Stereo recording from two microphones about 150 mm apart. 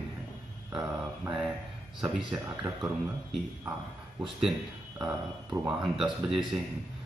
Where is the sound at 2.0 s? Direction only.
5° right (ahead or behind).